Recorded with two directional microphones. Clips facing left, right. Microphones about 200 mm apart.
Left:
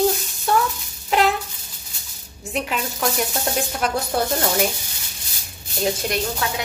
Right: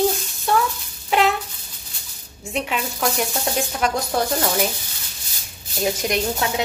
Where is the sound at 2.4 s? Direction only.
Centre (ahead or behind).